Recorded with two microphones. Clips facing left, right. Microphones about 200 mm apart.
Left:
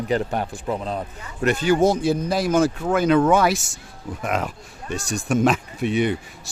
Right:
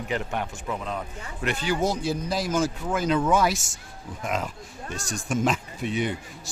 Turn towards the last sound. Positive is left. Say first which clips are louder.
# left 6 dB
turn(degrees=65)  # may be behind; listen again after turning